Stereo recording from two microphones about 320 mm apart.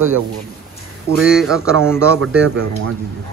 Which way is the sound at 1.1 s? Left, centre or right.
Centre.